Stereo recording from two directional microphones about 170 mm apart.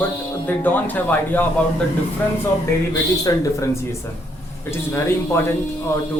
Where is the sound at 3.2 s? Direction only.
20° left (ahead or behind).